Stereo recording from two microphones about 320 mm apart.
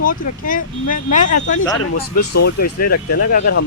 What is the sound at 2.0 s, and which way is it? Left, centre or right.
Speech, left.